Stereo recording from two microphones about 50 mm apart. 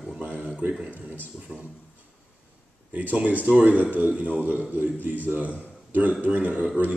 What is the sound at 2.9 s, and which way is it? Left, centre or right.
Speech, right.